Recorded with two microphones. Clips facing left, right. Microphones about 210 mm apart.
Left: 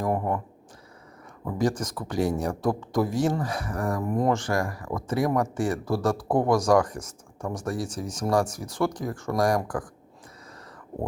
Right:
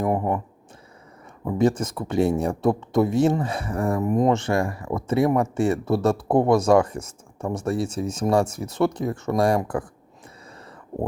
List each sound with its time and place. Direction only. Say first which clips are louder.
0.0 s speech: right 3 dB; 20° right (ahead or behind)
1.5 s speech: right 5 dB; 25° right (ahead or behind)